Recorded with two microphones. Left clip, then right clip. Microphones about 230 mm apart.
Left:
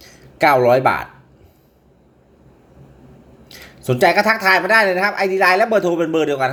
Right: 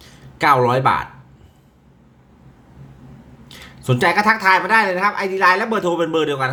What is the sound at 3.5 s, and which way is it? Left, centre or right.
A man's voice, centre.